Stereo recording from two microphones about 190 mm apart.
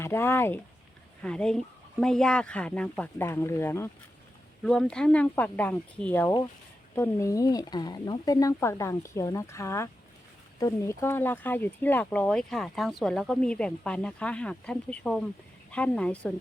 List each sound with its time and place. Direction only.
0.0 s speech: 10° left (ahead or behind)